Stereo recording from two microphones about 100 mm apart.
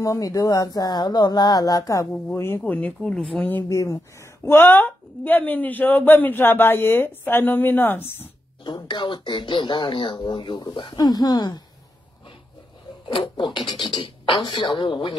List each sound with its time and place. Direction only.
0.0 s speech: 35° left (ahead or behind)
2.3 s a woman's voice: 25° left (ahead or behind)
2.6 s speech: 15° left (ahead or behind)
3.6 s a woman's voice: 30° left (ahead or behind)
8.6 s speech: 50° left (ahead or behind)
13.1 s speech: 50° left (ahead or behind)